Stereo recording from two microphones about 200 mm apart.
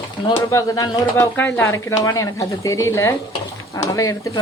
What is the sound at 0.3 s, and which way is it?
Speech, 15° left (ahead or behind).